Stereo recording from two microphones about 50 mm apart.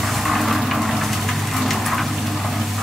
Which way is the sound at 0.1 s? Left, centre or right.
Centre.